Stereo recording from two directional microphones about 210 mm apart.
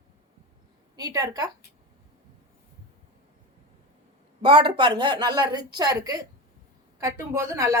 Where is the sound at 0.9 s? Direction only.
15° right (ahead or behind).